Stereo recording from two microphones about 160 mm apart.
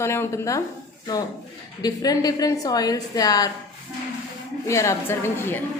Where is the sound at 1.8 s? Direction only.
25° left (ahead or behind).